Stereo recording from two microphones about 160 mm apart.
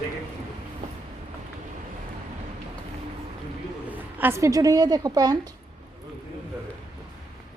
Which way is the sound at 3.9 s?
15° right (ahead or behind).